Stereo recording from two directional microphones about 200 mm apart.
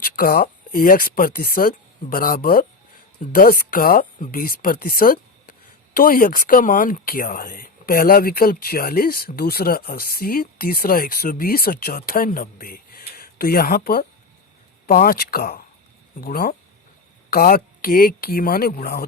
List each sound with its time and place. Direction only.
0.0 s speech: 45° left (ahead or behind)